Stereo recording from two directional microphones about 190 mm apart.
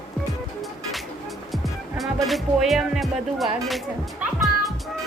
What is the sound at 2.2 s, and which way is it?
Music, centre (ahead or behind).